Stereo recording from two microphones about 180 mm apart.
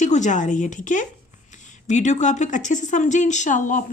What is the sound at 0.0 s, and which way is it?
A woman's voice, 40° left (ahead or behind).